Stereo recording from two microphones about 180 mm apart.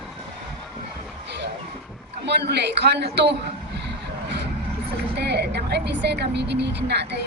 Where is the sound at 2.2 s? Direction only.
70° right (ahead or behind).